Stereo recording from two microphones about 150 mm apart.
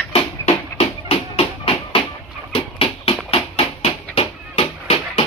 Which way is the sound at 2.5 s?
40° left (ahead or behind).